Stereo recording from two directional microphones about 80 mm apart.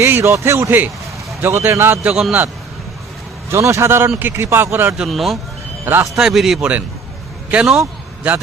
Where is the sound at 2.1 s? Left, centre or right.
Centre.